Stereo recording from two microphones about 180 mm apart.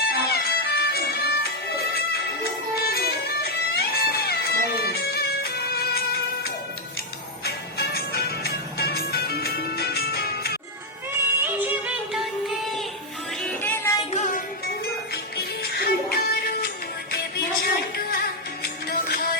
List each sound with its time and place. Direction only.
0.0 s music: 60° left (ahead or behind)
11.4 s music: 10° right (ahead or behind)
13.4 s music: 10° left (ahead or behind)
14.1 s music: 40° left (ahead or behind)
15.1 s music: 60° left (ahead or behind)